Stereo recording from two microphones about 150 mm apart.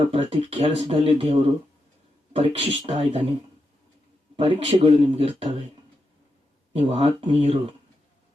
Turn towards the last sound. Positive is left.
turn(degrees=-40)  # may be behind; listen again after turning